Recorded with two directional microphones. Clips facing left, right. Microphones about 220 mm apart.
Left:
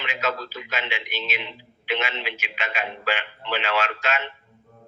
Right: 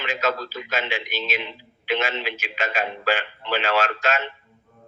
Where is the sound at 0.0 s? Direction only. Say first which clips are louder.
Right 3 dB; 45° right (ahead or behind).